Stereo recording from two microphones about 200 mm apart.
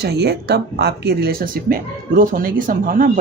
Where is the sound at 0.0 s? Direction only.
55° right (ahead or behind).